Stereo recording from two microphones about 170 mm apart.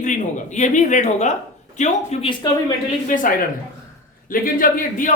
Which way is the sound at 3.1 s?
55° left (ahead or behind).